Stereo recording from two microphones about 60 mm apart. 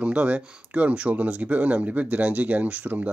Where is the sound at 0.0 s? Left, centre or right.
Centre.